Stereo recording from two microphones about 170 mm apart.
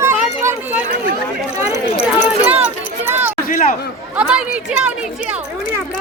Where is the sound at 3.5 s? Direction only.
50° left (ahead or behind).